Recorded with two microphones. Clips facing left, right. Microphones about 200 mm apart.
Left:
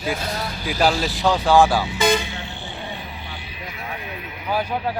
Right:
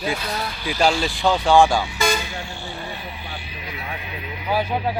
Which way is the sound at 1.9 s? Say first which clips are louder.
Left 3 dB; 20° left (ahead or behind).